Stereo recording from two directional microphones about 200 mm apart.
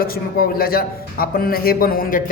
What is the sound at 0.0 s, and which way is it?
A man's voice, 45° left (ahead or behind).